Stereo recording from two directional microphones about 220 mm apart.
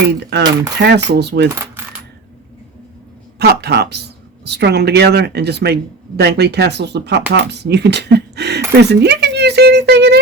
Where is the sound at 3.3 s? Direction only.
45° right (ahead or behind).